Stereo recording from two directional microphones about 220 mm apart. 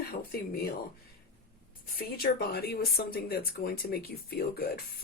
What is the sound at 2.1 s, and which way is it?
Speech, 45° left (ahead or behind).